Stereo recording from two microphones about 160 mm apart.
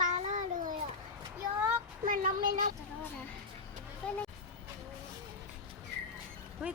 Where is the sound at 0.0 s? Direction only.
50° right (ahead or behind).